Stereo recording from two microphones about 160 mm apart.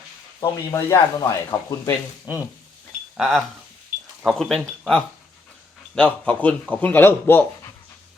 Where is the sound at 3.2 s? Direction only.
Centre (ahead or behind).